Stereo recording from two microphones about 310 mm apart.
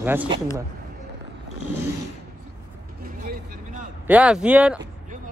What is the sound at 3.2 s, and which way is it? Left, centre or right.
Vehicle, right.